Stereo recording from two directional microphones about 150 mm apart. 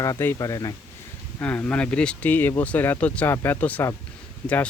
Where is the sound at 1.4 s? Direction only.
10° left (ahead or behind).